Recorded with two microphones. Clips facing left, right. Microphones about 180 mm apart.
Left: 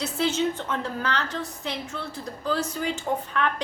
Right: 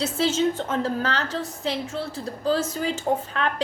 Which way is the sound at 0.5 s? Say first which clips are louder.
Right 5 dB; 40° right (ahead or behind).